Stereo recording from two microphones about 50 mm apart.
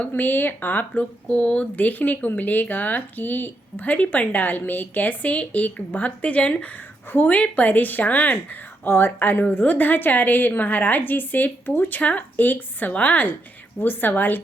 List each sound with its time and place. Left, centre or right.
0.2 s speech: left
1.3 s speech: left
1.7 s speech: left
8.9 s speech: left
12.9 s speech: left
13.7 s speech: left